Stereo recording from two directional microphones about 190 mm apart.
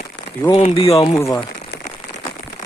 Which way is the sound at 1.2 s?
15° left (ahead or behind).